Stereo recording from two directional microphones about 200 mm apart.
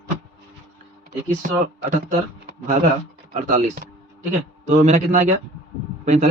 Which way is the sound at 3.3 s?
40° right (ahead or behind).